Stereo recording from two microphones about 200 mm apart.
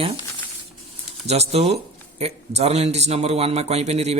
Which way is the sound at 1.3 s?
30° right (ahead or behind).